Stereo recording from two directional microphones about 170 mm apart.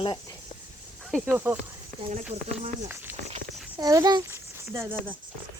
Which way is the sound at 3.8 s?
20° right (ahead or behind).